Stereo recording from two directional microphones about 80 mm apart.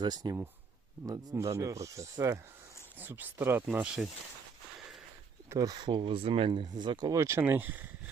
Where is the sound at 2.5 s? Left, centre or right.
Right.